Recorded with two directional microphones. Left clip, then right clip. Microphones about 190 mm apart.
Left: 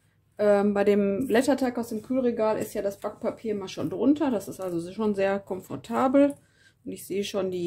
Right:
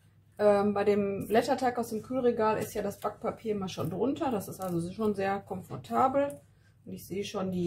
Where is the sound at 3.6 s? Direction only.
45° left (ahead or behind).